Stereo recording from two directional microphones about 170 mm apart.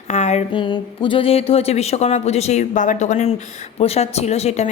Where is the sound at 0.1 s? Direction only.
40° left (ahead or behind).